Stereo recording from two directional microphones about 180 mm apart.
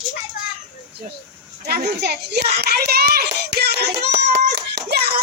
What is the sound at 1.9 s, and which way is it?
A child's voice, 65° right (ahead or behind).